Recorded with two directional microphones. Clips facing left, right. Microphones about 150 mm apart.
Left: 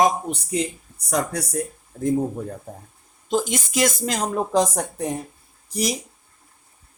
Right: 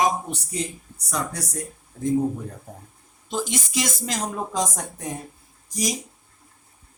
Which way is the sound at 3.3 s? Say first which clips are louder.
Left 5 dB; 50° left (ahead or behind).